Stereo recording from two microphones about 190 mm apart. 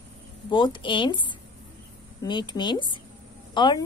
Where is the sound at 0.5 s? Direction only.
25° left (ahead or behind).